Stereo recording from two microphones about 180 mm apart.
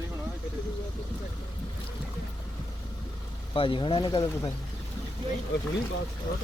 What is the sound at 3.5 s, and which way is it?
Speech, 30° left (ahead or behind).